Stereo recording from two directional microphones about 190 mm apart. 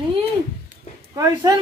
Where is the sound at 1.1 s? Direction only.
15° right (ahead or behind).